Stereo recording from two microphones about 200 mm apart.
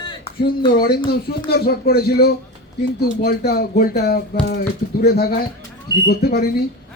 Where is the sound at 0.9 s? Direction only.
50° left (ahead or behind).